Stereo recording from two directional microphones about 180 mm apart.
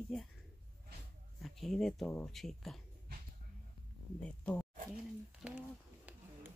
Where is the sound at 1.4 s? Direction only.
Centre (ahead or behind).